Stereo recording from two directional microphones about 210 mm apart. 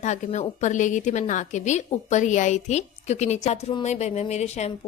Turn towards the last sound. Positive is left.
turn(degrees=30)  # may be behind; listen again after turning